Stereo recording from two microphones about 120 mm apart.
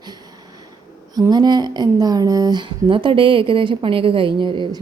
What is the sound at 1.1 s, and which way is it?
Speech, 35° right (ahead or behind).